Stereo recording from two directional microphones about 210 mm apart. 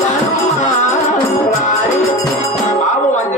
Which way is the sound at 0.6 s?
35° left (ahead or behind).